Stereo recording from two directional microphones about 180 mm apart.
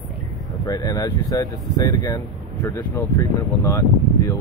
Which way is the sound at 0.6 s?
20° left (ahead or behind).